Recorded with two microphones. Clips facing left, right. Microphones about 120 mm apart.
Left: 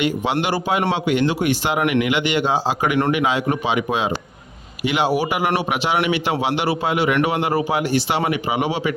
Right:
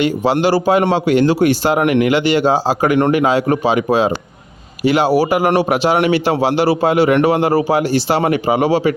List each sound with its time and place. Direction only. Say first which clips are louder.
0.4 s a man's voice: right 7 dB; 35° right (ahead or behind)